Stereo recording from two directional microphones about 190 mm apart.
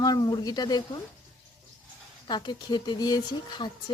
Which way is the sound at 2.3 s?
25° left (ahead or behind).